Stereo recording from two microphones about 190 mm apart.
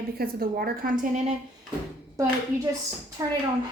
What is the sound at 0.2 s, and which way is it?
A woman's voice, 55° right (ahead or behind).